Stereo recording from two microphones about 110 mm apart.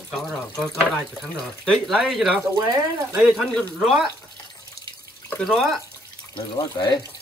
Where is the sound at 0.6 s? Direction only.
5° left (ahead or behind).